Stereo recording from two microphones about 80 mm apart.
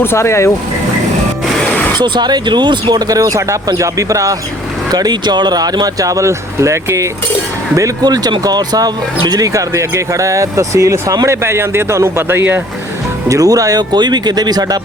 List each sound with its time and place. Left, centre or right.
0.0 s speech: left
2.0 s speech: right
2.8 s speech: right
4.9 s speech: right
8.0 s speech: right
11.4 s a man's voice: right
13.2 s speech: right
13.9 s speech: right